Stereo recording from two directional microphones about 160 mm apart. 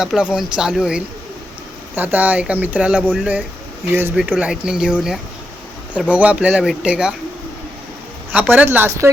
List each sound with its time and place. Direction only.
0.0 s speech: 5° right (ahead or behind)
3.9 s speech: 15° right (ahead or behind)
8.3 s speech: 10° right (ahead or behind)